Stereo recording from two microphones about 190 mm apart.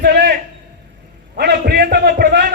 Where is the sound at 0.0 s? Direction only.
55° right (ahead or behind).